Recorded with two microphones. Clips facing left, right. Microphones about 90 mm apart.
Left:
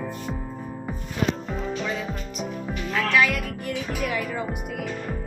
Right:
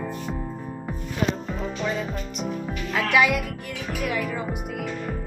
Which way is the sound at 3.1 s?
15° right (ahead or behind).